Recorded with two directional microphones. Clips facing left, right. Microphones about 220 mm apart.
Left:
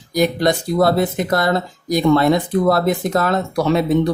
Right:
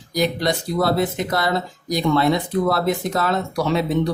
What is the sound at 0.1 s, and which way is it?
Speech, 50° left (ahead or behind).